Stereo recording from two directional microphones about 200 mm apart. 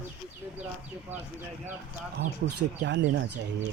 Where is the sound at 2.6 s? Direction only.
60° right (ahead or behind).